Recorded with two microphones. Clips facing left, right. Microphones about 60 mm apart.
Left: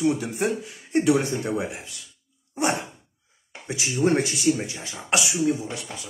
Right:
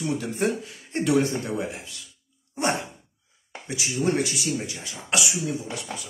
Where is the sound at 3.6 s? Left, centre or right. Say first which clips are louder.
Left 3 dB; left.